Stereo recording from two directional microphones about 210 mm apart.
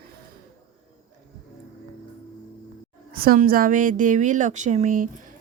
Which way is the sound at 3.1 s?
45° right (ahead or behind).